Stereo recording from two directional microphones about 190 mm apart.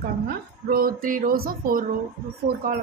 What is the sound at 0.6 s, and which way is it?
A woman's voice, 50° right (ahead or behind).